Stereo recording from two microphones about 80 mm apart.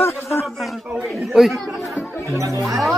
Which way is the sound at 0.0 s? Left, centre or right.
Left.